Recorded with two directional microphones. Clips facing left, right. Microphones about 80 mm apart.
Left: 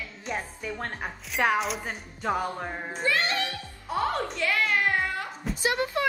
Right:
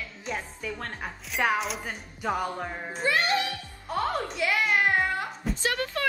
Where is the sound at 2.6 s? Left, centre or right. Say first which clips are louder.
Even; centre.